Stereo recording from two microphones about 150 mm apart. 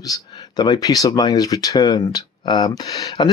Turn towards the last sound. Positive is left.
turn(degrees=25)  # may be behind; listen again after turning